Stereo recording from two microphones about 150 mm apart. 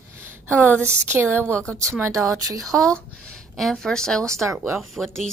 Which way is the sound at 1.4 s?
10° left (ahead or behind).